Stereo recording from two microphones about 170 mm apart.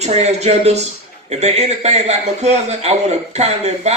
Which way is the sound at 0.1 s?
40° right (ahead or behind).